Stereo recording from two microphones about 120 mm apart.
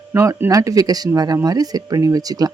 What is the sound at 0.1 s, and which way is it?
Speech, 25° right (ahead or behind).